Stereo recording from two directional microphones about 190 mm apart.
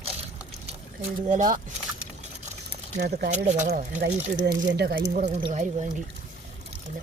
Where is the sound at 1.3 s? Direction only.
45° right (ahead or behind).